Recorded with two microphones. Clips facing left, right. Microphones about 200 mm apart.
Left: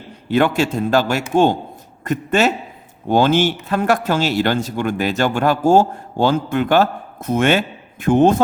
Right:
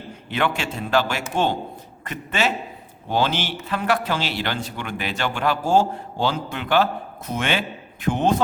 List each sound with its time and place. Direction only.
0.3 s speech: 40° left (ahead or behind)